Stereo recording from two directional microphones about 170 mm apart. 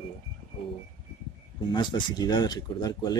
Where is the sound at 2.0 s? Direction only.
25° left (ahead or behind).